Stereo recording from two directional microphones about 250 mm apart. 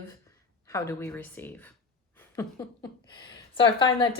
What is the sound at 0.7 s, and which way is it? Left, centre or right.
A woman's voice, centre.